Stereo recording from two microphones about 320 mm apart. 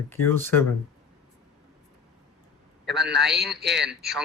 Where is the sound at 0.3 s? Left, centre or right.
Centre.